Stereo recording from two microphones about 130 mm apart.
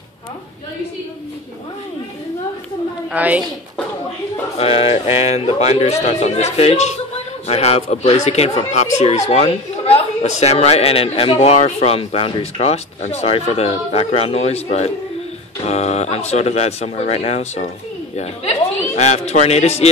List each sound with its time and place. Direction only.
3.1 s a woman's voice: 10° right (ahead or behind)
4.6 s a man's voice: 45° left (ahead or behind)